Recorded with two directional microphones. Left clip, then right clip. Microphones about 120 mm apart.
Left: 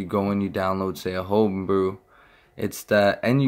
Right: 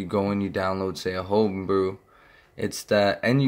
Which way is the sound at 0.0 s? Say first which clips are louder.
Left 1 dB; 20° left (ahead or behind).